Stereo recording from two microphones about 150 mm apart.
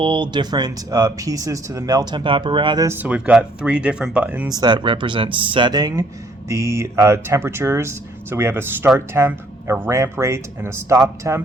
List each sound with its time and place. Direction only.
0.0 s speech: 30° right (ahead or behind)
2.8 s speech: 15° right (ahead or behind)
4.4 s speech: 25° right (ahead or behind)